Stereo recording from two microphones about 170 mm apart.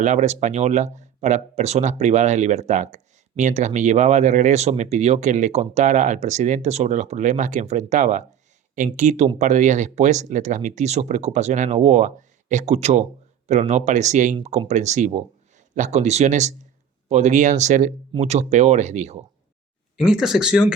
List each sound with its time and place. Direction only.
0.0 s speech: 45° right (ahead or behind)
20.0 s speech: centre (ahead or behind)